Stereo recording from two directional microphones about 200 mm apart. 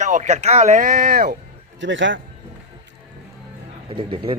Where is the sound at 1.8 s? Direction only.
70° right (ahead or behind).